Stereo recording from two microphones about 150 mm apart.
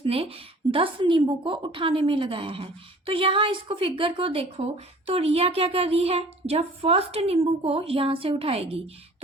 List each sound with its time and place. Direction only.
0.0 s a woman's voice: 40° right (ahead or behind)